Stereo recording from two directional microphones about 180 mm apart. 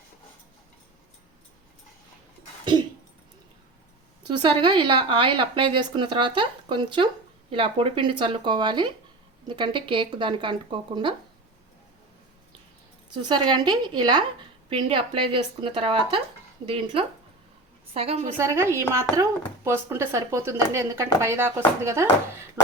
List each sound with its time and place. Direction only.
4.3 s a woman's voice: 25° right (ahead or behind)
13.2 s a woman's voice: 25° right (ahead or behind)
18.3 s speech: 15° right (ahead or behind)